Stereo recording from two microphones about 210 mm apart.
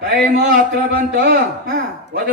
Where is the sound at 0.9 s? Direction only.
45° right (ahead or behind).